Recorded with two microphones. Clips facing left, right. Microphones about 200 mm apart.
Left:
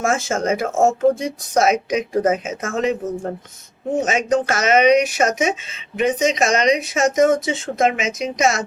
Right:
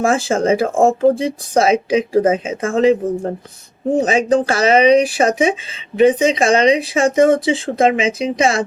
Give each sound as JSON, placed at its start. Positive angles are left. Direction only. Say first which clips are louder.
{"t": 0.0, "sound": "speech", "louder": "right 5 dB", "side_deg": -30}
{"t": 3.9, "sound": "speech", "louder": "right 4 dB", "side_deg": -30}